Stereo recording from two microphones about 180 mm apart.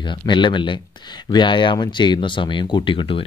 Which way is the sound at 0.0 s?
25° left (ahead or behind).